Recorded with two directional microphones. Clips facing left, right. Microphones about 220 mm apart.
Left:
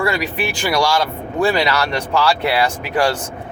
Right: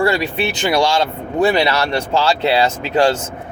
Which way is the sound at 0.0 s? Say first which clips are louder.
Right 3 dB; 30° right (ahead or behind).